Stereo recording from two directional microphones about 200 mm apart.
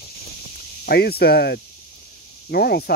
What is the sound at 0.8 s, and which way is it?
Speech, 50° left (ahead or behind).